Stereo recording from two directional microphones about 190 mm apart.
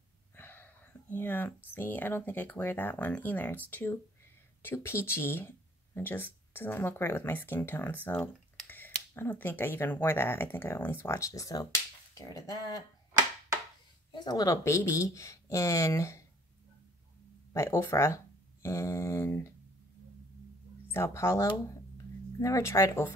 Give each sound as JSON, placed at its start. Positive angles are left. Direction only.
{"t": 0.4, "sound": "speech", "side_deg": 10}
{"t": 12.1, "sound": "finger snapping", "side_deg": 20}
{"t": 14.1, "sound": "speech", "side_deg": 20}
{"t": 17.5, "sound": "speech", "side_deg": 15}
{"t": 20.9, "sound": "speech", "side_deg": 15}